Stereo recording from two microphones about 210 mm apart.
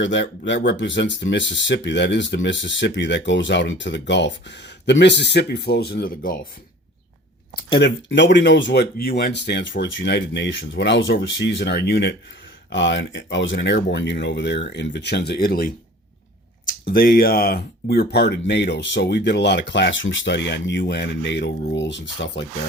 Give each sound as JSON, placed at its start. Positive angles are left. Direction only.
{"t": 0.0, "sound": "speech", "side_deg": 60}
{"t": 7.8, "sound": "speech", "side_deg": 55}
{"t": 16.9, "sound": "speech", "side_deg": 45}